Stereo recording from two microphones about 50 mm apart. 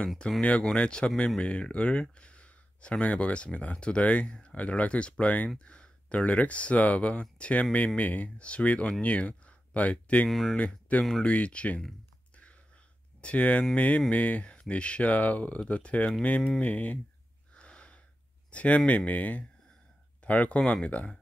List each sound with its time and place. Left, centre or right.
0.4 s speech: left
4.6 s speech: left
10.2 s speech: centre
10.5 s speech: left
13.2 s speech: left
17.6 s wheeze: centre
18.5 s speech: left